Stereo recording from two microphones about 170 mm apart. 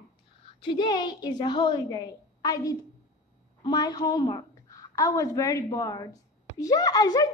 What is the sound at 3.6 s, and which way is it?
A woman's voice, 25° left (ahead or behind).